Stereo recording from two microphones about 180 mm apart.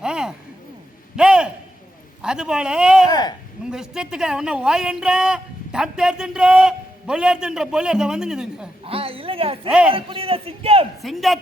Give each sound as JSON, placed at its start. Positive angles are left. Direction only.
{"t": 0.0, "sound": "a sound", "side_deg": -5}
{"t": 2.2, "sound": "speech", "side_deg": -5}
{"t": 3.1, "sound": "speech", "side_deg": 25}
{"t": 3.7, "sound": "speech", "side_deg": -5}
{"t": 8.8, "sound": "speech", "side_deg": -30}
{"t": 9.6, "sound": "speech", "side_deg": -5}
{"t": 9.9, "sound": "a man's voice", "side_deg": -30}
{"t": 11.0, "sound": "speech", "side_deg": 0}